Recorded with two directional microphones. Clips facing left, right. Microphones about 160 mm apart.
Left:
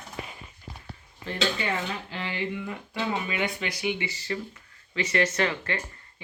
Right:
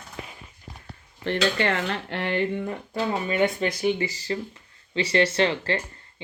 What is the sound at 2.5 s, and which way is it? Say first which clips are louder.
Speech: right 5 dB; 35° right (ahead or behind).